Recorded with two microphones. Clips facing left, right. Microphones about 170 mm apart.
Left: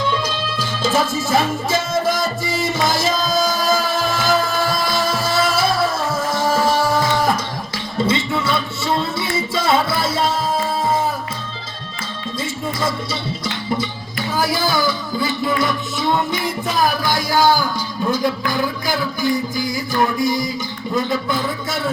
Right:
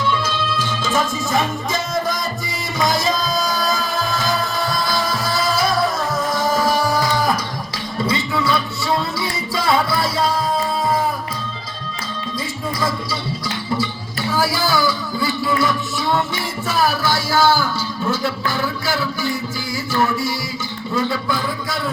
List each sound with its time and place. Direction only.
0.2 s music: 10° left (ahead or behind)
4.2 s music: 5° left (ahead or behind)
4.9 s music: 25° left (ahead or behind)
6.6 s music: 25° left (ahead or behind)
12.8 s music: 20° left (ahead or behind)
20.9 s speech: 20° left (ahead or behind)